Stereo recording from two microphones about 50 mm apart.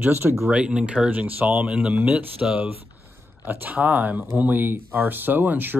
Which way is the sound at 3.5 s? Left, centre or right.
Right.